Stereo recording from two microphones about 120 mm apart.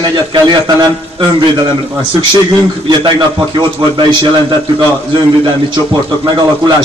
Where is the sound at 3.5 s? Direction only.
40° right (ahead or behind).